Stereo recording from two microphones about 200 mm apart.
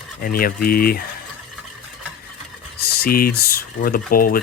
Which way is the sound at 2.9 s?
50° left (ahead or behind).